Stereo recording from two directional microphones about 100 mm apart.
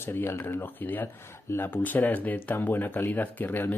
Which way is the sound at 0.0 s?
25° left (ahead or behind).